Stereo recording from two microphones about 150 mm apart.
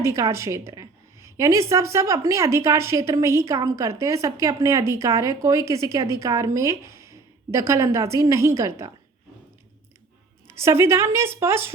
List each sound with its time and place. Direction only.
0.0 s a woman's voice: 20° right (ahead or behind)
10.4 s a woman's voice: 15° right (ahead or behind)